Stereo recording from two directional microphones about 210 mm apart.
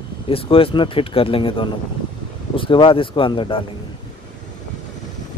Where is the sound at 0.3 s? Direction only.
25° left (ahead or behind).